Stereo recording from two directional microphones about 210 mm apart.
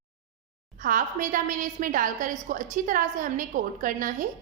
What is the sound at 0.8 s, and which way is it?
A woman's voice, 40° right (ahead or behind).